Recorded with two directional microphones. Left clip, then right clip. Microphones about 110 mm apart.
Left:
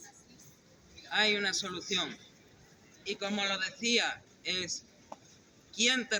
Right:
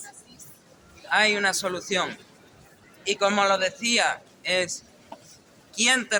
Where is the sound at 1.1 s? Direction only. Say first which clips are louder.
Right 8 dB; 50° right (ahead or behind).